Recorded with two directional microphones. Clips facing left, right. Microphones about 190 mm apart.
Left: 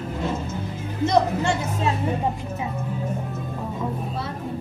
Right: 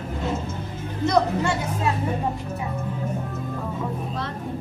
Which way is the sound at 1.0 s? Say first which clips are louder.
Left 1 dB; 25° left (ahead or behind).